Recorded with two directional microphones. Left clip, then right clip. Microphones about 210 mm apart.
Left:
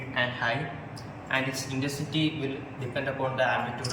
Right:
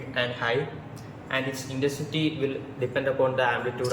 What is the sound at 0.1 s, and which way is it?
Speech, 5° right (ahead or behind).